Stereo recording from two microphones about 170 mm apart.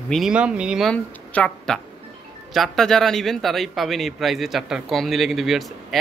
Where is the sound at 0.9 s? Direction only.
10° left (ahead or behind).